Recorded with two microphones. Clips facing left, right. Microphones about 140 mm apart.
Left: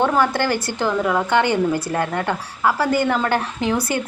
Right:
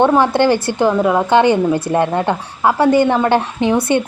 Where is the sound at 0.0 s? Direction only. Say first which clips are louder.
Right 6 dB; 25° right (ahead or behind).